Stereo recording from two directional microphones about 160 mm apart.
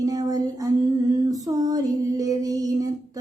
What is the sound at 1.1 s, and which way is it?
Female singing, 20° right (ahead or behind).